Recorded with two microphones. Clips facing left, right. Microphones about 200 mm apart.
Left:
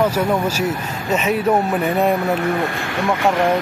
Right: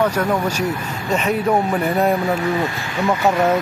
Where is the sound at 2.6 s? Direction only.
60° left (ahead or behind).